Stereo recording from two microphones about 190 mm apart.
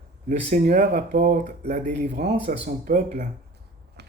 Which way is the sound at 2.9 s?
45° right (ahead or behind).